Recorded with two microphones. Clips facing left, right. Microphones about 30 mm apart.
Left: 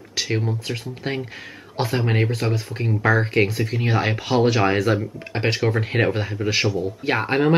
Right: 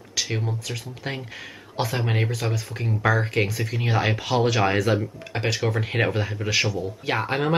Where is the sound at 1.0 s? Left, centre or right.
Centre.